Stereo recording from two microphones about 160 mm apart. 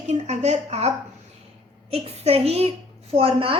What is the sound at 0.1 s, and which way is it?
A woman's voice, 45° right (ahead or behind).